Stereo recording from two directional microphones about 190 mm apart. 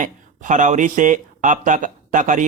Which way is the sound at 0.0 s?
40° right (ahead or behind).